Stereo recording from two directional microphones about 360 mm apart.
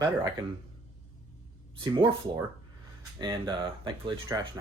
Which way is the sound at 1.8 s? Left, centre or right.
Centre.